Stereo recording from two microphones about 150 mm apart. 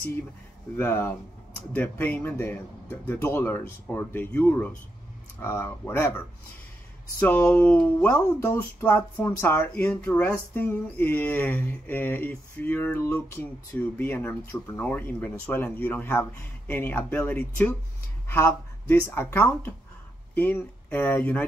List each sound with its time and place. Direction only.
0.7 s speech: 15° left (ahead or behind)